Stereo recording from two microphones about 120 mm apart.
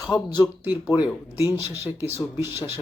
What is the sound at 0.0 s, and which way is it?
Speech, 35° left (ahead or behind).